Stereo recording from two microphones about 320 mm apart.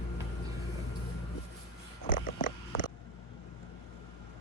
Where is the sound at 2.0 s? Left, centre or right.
Left.